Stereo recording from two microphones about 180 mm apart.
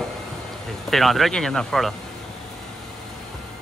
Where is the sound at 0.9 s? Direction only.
Centre (ahead or behind).